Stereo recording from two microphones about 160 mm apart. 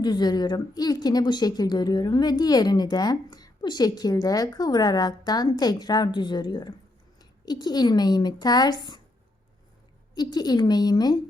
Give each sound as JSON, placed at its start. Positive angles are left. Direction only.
{"t": 0.0, "sound": "a woman's voice", "side_deg": 25}
{"t": 10.2, "sound": "a woman's voice", "side_deg": 25}